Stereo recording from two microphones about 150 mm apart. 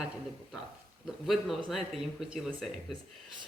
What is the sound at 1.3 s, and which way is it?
A man's voice, centre (ahead or behind).